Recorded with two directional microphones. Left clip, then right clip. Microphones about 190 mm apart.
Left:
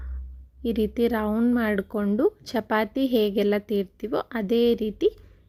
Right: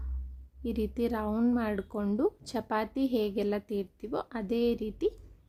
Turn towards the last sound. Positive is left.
turn(degrees=20)  # may be behind; listen again after turning